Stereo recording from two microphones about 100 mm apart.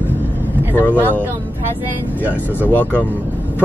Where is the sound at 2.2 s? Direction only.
20° right (ahead or behind).